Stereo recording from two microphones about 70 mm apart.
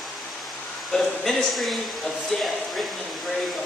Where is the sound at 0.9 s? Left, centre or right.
Centre.